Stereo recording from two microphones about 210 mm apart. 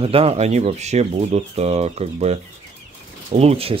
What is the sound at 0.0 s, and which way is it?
Speech, 25° right (ahead or behind).